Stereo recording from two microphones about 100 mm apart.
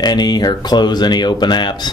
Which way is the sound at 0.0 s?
45° left (ahead or behind).